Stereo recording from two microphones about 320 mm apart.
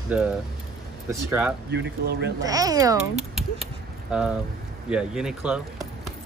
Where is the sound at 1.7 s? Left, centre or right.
Right.